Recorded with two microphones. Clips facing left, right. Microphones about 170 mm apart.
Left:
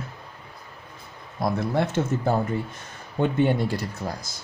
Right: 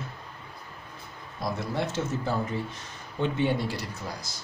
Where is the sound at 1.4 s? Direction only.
55° left (ahead or behind).